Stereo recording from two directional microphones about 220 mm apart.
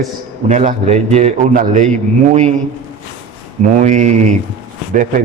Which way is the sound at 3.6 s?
35° right (ahead or behind).